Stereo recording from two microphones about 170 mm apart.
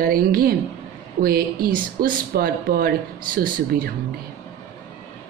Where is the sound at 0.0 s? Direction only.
60° right (ahead or behind).